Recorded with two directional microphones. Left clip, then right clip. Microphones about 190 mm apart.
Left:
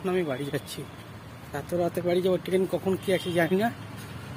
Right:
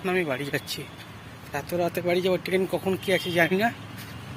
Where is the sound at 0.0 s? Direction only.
5° left (ahead or behind).